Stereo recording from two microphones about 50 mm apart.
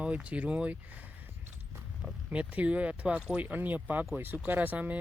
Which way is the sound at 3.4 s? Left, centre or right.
Right.